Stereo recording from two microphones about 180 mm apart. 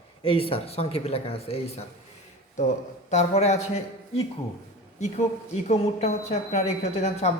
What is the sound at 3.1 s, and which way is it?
Speech, 40° left (ahead or behind).